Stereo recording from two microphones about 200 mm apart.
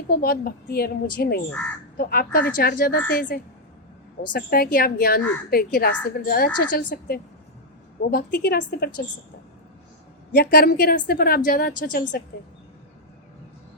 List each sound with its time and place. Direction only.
0.1 s a woman's voice: 50° left (ahead or behind)
10.3 s a woman's voice: 50° left (ahead or behind)